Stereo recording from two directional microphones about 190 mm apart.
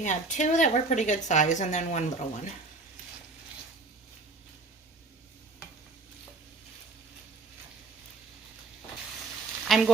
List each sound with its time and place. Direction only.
0.0 s a woman's voice: 40° left (ahead or behind)
9.6 s sizzle: centre (ahead or behind)